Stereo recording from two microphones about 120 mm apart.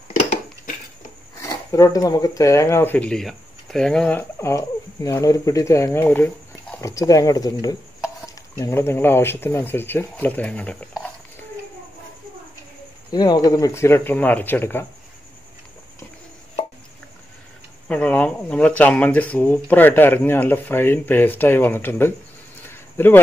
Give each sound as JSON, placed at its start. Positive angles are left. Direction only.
{"t": 1.4, "sound": "speech", "side_deg": 25}
{"t": 4.2, "sound": "speech", "side_deg": 20}
{"t": 13.1, "sound": "speech", "side_deg": 35}
{"t": 17.8, "sound": "speech", "side_deg": 10}
{"t": 22.7, "sound": "a sound", "side_deg": 20}